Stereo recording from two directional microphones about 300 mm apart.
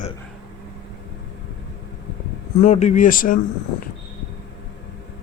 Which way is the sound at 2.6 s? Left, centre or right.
Left.